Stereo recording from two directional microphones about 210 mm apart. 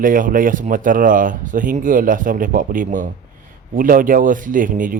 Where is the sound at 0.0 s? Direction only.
40° right (ahead or behind).